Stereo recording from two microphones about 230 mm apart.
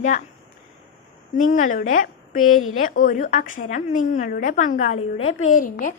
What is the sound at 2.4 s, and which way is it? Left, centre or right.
Speech, left.